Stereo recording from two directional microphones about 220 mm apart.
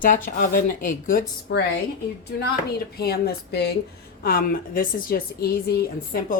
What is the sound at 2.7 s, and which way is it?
A woman's voice, 45° left (ahead or behind).